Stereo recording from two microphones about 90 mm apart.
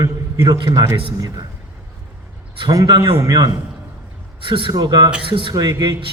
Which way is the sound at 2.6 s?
45° right (ahead or behind).